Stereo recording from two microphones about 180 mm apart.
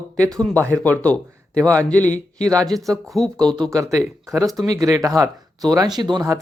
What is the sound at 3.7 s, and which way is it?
Speech, 15° right (ahead or behind).